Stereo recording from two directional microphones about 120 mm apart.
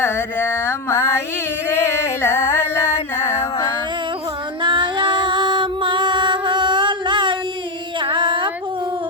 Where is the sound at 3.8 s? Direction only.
40° right (ahead or behind).